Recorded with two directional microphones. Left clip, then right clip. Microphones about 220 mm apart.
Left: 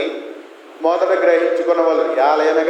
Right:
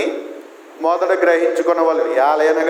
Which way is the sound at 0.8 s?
50° right (ahead or behind).